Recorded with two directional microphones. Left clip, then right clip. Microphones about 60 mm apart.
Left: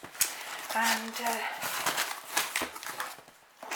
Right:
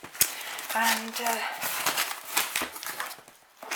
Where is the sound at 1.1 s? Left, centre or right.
Right.